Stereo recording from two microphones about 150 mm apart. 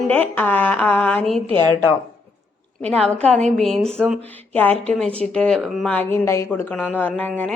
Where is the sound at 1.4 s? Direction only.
35° right (ahead or behind).